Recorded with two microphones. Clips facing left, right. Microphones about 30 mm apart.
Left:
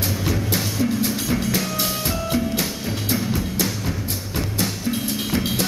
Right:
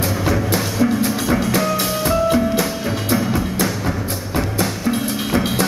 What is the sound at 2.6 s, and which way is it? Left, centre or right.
Music, right.